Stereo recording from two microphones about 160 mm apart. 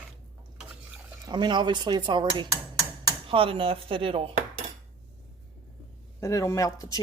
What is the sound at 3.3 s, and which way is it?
Speech, 35° right (ahead or behind).